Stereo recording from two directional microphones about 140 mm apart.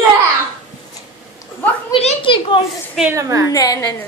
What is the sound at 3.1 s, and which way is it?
Speech, 20° right (ahead or behind).